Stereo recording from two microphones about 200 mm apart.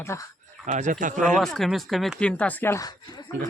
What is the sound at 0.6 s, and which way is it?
Speech, 40° right (ahead or behind).